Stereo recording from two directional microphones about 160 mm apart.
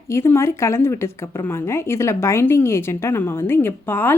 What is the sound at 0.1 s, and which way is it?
A woman's voice, 15° left (ahead or behind).